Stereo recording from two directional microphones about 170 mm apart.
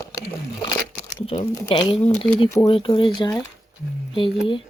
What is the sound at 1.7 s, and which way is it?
Speech, 25° left (ahead or behind).